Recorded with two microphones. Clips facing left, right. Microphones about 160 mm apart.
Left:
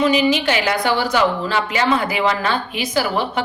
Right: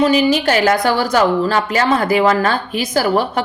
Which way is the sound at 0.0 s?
40° right (ahead or behind).